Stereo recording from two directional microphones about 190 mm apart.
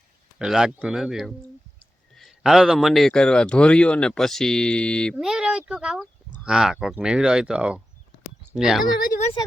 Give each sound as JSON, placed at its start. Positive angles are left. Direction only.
{"t": 0.3, "sound": "a man's voice", "side_deg": -5}
{"t": 9.0, "sound": "speech", "side_deg": 45}